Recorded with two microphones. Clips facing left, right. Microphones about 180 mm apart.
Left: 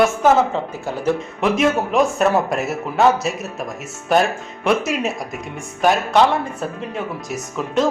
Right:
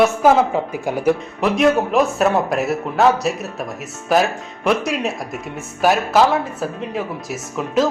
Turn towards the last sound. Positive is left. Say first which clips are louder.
# right 1 dB
turn(degrees=0)  # may be behind; listen again after turning